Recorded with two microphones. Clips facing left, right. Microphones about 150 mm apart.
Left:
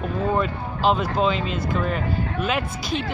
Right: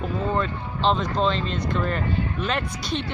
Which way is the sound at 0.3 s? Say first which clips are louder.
Left 2 dB; 10° left (ahead or behind).